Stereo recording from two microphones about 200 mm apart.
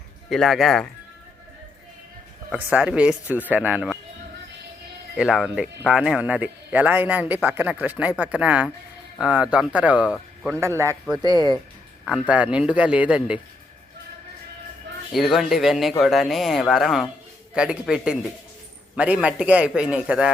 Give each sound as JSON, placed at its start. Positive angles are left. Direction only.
{"t": 0.3, "sound": "speech", "side_deg": 0}
{"t": 2.6, "sound": "speech", "side_deg": -10}
{"t": 5.1, "sound": "speech", "side_deg": -5}
{"t": 10.6, "sound": "speech", "side_deg": -15}
{"t": 12.0, "sound": "speech", "side_deg": 0}
{"t": 15.1, "sound": "speech", "side_deg": 0}